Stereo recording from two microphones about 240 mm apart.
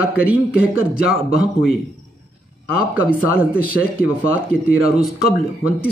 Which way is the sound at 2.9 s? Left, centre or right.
Centre.